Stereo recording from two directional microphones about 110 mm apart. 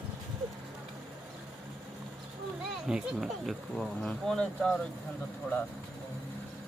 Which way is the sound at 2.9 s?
5° right (ahead or behind).